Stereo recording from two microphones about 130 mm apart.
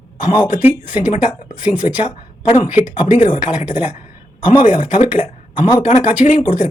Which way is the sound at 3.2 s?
85° left.